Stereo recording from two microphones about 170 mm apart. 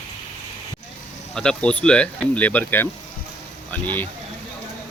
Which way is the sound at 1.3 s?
5° left (ahead or behind).